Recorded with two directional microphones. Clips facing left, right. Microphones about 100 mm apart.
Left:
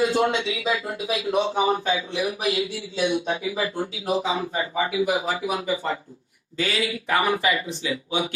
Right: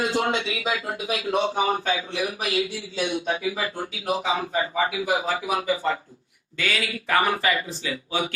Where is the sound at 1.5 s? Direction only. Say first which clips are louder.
Left 2 dB; 25° left (ahead or behind).